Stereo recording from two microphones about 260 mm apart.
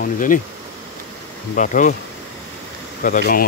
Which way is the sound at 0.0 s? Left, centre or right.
Left.